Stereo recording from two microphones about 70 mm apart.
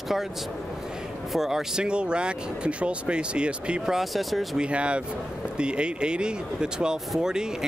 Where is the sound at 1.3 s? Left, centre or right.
Centre.